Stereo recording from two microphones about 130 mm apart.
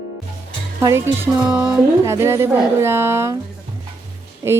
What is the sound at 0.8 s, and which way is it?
Speech, 25° right (ahead or behind).